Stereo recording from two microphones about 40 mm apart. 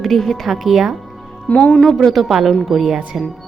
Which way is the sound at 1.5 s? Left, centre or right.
Left.